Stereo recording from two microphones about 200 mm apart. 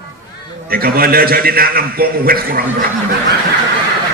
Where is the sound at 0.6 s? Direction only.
50° right (ahead or behind).